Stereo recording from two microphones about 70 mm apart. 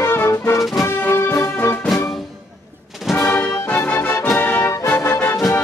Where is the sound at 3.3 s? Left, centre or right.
Left.